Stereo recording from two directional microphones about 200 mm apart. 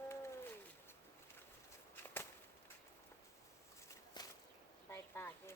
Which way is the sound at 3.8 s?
20° left (ahead or behind).